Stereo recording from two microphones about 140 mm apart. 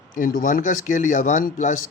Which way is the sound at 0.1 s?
80° left.